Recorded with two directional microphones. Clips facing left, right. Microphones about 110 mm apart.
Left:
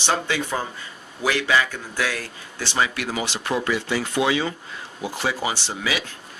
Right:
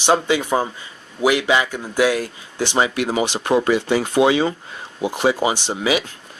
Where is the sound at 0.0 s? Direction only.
15° right (ahead or behind).